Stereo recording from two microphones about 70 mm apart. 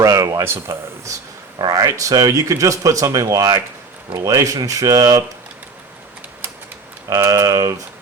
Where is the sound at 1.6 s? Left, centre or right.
Right.